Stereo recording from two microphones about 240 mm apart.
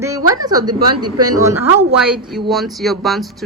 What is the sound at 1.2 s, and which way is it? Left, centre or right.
Speech, centre.